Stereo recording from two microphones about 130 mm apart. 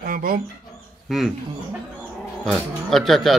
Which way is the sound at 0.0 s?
90° right.